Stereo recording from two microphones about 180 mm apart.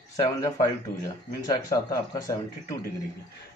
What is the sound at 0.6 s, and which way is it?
Speech, 20° left (ahead or behind).